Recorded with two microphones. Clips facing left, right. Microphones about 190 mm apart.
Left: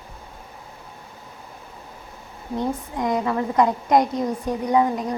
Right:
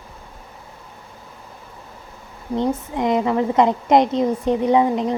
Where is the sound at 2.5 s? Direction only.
20° right (ahead or behind).